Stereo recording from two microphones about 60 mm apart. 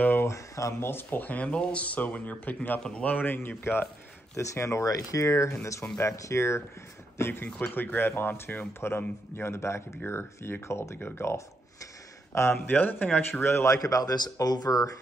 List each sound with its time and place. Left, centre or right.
0.0 s a sound: left
0.3 s speech: left
0.7 s speech: left
1.2 s speech: left
3.3 s speech: left
4.4 s speech: left
7.4 s speech: centre
7.7 s speech: left
9.4 s speech: left
12.6 s speech: left
13.3 s speech: left
13.7 s speech: left